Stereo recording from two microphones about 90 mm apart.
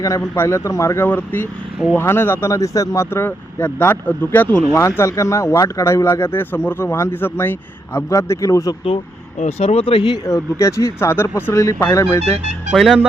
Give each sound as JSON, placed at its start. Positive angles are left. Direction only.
{"t": 0.3, "sound": "speech", "side_deg": 30}
{"t": 1.0, "sound": "speech", "side_deg": 20}
{"t": 9.6, "sound": "speech", "side_deg": 90}
{"t": 10.2, "sound": "speech", "side_deg": 35}
{"t": 11.5, "sound": "speech", "side_deg": 35}
{"t": 12.7, "sound": "speech", "side_deg": 0}